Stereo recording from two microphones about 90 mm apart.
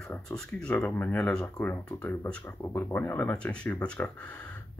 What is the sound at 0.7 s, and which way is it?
Speech, 25° left (ahead or behind).